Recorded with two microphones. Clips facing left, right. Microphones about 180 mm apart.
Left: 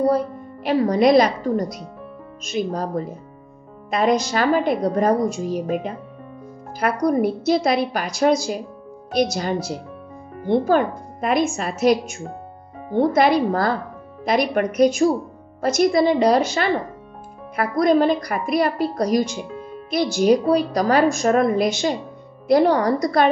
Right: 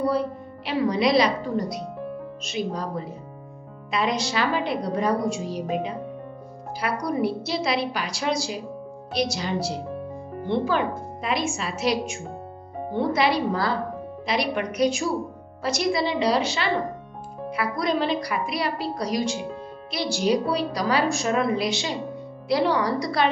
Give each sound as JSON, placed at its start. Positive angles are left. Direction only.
{"t": 0.7, "sound": "a woman's voice", "side_deg": 45}